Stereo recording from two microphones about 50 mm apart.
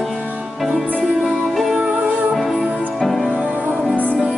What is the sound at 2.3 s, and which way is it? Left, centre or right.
Music, centre.